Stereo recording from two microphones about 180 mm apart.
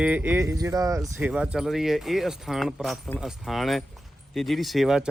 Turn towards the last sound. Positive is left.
turn(degrees=0)  # may be behind; listen again after turning